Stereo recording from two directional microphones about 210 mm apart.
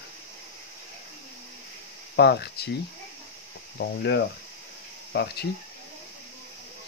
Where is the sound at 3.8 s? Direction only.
50° left (ahead or behind).